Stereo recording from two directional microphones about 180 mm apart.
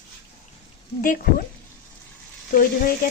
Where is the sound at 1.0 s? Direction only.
55° left (ahead or behind).